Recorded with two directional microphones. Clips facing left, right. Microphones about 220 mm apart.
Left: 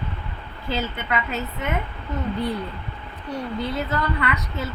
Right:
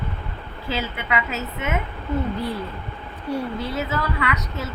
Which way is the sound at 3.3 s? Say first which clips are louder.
Right 1 dB; 5° right (ahead or behind).